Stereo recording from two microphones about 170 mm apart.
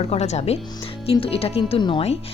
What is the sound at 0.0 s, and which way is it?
Speech, 40° left (ahead or behind).